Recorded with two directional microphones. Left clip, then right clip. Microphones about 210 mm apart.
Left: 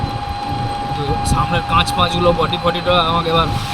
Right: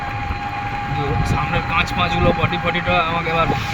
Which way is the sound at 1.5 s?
20° left (ahead or behind).